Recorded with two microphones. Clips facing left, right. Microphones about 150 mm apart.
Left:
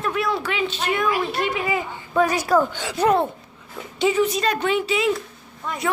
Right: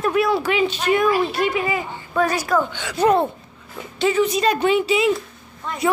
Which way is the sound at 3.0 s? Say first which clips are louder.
Right 2 dB; centre (ahead or behind).